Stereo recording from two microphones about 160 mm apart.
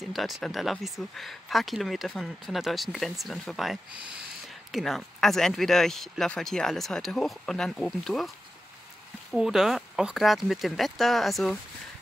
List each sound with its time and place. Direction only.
0.1 s speech: centre (ahead or behind)
9.3 s speech: 5° right (ahead or behind)